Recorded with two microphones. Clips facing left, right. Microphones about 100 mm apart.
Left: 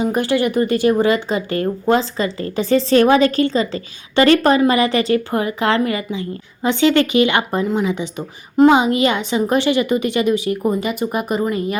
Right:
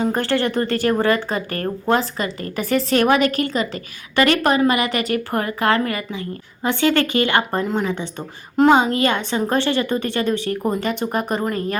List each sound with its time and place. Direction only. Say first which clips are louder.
0.0 s a woman's voice: left 2 dB; 15° left (ahead or behind)
7.6 s a woman's voice: left 3 dB; 5° left (ahead or behind)